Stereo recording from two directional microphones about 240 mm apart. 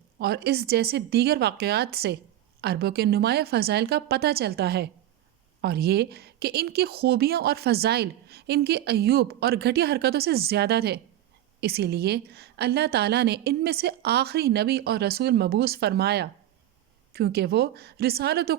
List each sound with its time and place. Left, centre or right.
0.2 s speech: right